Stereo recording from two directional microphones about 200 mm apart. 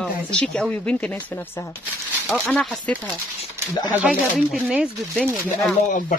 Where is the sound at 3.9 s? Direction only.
5° right (ahead or behind).